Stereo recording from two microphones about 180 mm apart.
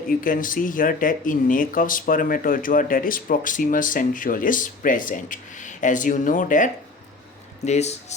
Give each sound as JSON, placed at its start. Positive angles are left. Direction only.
{"t": 0.1, "sound": "speech", "side_deg": 50}